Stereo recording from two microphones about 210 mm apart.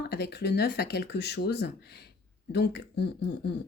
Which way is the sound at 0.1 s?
50° left (ahead or behind).